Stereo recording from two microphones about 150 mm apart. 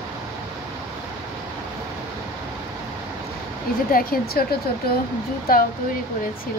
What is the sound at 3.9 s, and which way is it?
Speech, 80° left.